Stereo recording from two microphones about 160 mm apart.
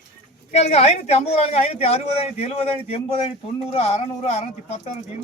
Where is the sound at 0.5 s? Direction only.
45° left (ahead or behind).